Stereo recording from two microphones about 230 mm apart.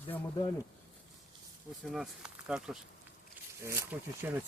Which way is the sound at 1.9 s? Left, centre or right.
Centre.